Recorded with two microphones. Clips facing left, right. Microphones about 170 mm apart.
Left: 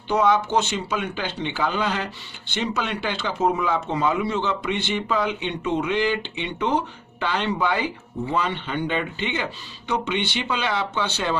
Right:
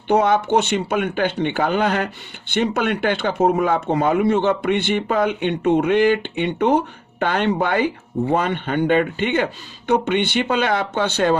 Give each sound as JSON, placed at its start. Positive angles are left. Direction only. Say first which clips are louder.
{"t": 0.1, "sound": "speech", "louder": "right 4 dB", "side_deg": -55}